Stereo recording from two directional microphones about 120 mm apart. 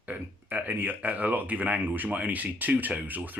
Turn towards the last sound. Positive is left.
turn(degrees=-15)  # may be behind; listen again after turning